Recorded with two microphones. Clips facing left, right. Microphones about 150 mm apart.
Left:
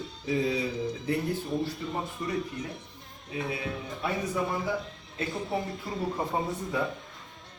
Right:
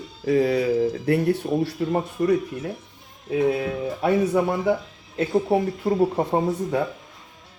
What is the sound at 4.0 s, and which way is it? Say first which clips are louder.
A man's voice: right 10 dB; 70° right (ahead or behind).